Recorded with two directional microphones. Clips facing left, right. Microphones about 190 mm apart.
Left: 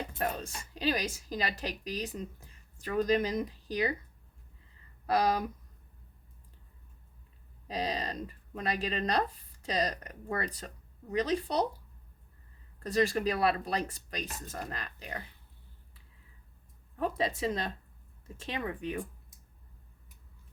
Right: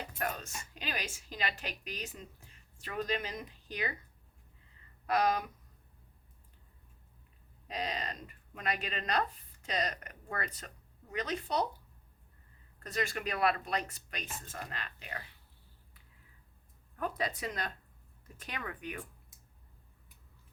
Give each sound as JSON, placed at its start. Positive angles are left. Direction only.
{"t": 0.2, "sound": "speech", "side_deg": 30}
{"t": 5.0, "sound": "speech", "side_deg": 35}
{"t": 7.7, "sound": "speech", "side_deg": 35}
{"t": 12.8, "sound": "speech", "side_deg": 35}
{"t": 17.0, "sound": "speech", "side_deg": 25}